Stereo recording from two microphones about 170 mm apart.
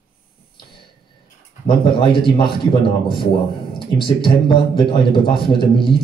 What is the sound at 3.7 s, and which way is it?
A man's voice, 30° left (ahead or behind).